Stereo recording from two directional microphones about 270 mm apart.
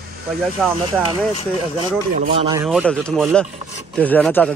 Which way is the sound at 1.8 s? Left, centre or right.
Right.